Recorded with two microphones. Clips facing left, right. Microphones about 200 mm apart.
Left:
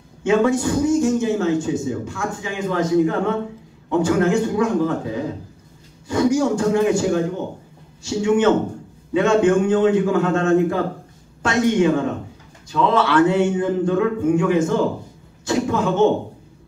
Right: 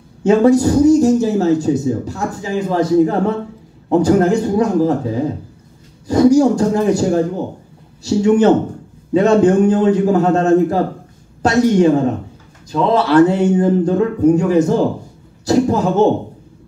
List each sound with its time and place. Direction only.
0.2 s a man's voice: 40° right (ahead or behind)